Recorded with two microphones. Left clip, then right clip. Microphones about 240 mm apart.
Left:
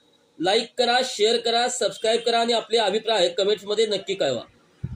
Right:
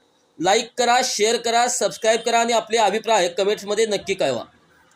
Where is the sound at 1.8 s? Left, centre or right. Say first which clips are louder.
Right 3 dB; centre.